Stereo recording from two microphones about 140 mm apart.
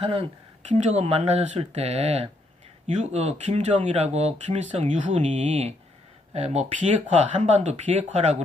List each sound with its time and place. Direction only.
0.0 s speech: 40° right (ahead or behind)